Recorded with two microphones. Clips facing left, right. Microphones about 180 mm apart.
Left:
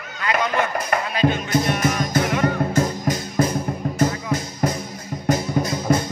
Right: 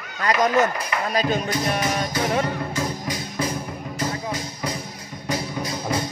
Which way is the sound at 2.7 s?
50° left (ahead or behind).